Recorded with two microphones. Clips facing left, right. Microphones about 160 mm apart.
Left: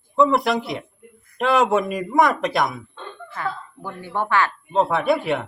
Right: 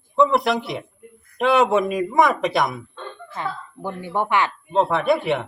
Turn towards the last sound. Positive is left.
turn(degrees=0)  # may be behind; listen again after turning